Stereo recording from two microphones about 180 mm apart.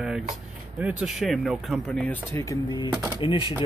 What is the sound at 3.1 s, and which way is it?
Speech, 30° left (ahead or behind).